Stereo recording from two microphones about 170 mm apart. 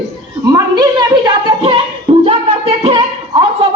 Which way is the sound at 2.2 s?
35° right (ahead or behind).